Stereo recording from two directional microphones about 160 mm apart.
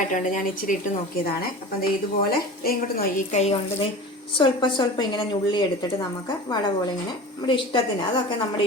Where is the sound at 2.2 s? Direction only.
70° left (ahead or behind); by 3.5 s 45° left (ahead or behind).